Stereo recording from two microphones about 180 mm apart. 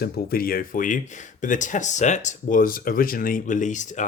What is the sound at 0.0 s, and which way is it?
Speech, 55° left (ahead or behind).